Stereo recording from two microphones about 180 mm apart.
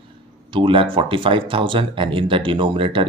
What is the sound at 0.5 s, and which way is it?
Speech, 30° right (ahead or behind).